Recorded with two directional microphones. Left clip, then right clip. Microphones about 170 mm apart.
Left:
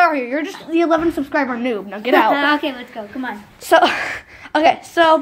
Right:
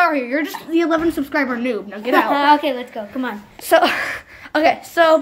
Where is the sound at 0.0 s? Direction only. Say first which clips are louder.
Left 1 dB; centre (ahead or behind).